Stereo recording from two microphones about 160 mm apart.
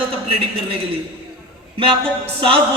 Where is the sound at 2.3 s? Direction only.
35° right (ahead or behind).